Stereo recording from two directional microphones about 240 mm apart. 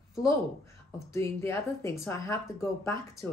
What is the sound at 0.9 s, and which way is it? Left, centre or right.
Speech, centre.